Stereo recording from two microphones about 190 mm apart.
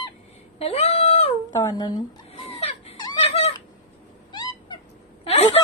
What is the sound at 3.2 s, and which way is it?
Cat, 35° left (ahead or behind).